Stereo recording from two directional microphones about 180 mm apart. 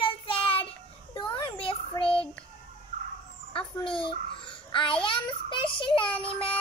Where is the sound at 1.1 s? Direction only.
25° left (ahead or behind).